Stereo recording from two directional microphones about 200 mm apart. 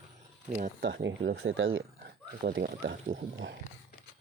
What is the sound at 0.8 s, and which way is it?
Speech, 65° right (ahead or behind).